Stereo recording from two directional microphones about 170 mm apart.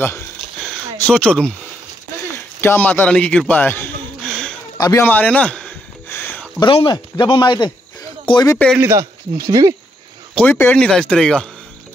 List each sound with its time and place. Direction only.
1.0 s speech: 5° left (ahead or behind)
2.6 s a man's voice: 10° left (ahead or behind)
4.7 s a man's voice: 25° left (ahead or behind)
5.0 s a sound: 10° left (ahead or behind)
6.6 s a man's voice: 30° left (ahead or behind)
8.7 s a man's voice: 10° right (ahead or behind)
9.5 s speech: 25° right (ahead or behind)
10.3 s speech: 10° left (ahead or behind)